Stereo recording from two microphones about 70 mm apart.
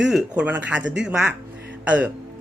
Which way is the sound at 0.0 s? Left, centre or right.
Centre.